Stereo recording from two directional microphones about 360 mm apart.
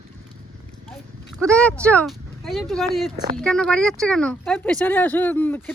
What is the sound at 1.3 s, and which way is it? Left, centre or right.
Speech, centre.